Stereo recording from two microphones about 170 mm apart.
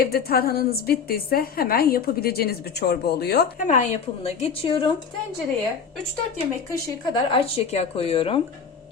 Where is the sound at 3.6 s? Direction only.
45° left (ahead or behind).